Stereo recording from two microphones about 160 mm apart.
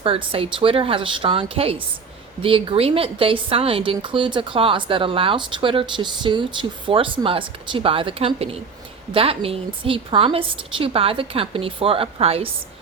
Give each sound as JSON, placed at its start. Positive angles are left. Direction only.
{"t": 0.0, "sound": "a woman's voice", "side_deg": -35}